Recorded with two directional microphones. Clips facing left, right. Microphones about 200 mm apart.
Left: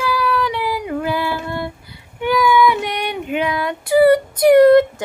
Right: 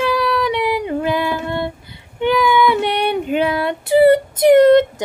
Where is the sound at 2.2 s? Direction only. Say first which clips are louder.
Even; 25° right (ahead or behind).